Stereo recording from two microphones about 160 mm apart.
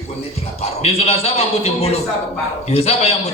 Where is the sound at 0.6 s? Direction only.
40° left (ahead or behind).